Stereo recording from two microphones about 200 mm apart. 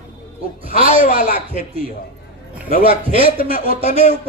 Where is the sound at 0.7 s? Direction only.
30° right (ahead or behind).